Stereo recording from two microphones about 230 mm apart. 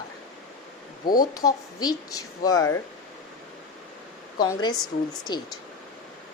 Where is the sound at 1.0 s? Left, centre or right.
Left.